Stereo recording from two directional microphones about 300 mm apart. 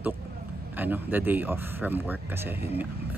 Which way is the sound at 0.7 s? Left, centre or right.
Centre.